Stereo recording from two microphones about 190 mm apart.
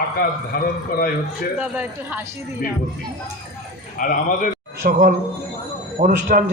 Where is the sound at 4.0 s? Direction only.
45° left (ahead or behind).